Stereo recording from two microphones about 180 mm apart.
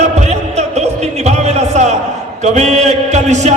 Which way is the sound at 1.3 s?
40° right (ahead or behind).